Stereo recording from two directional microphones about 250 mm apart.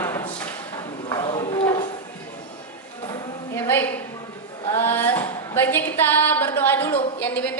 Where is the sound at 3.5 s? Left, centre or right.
Centre.